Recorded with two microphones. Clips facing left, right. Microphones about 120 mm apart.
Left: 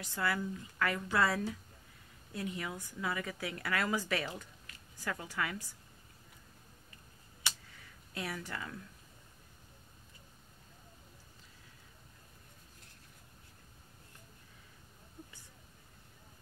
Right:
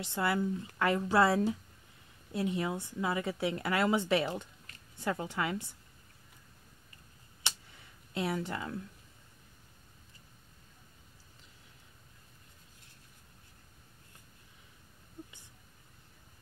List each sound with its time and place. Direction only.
0.0 s a woman's voice: 25° right (ahead or behind)
8.1 s a woman's voice: 25° right (ahead or behind)